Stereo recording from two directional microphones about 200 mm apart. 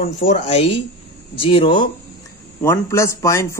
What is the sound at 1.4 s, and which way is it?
Speech, 25° left (ahead or behind).